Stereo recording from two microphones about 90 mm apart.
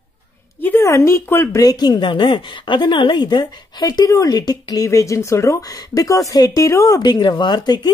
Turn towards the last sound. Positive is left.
turn(degrees=50)  # may be behind; listen again after turning